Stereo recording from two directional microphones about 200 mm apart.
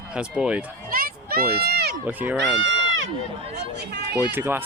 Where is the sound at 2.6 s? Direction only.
70° right (ahead or behind).